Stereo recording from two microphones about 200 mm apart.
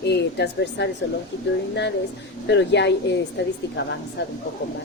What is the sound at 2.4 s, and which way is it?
A woman's voice, 60° left (ahead or behind).